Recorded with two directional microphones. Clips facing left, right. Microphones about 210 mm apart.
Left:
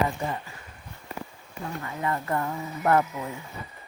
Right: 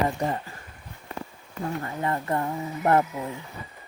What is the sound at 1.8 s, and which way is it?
Speech, 30° right (ahead or behind).